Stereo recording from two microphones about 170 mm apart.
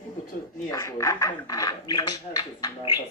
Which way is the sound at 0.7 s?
20° left (ahead or behind).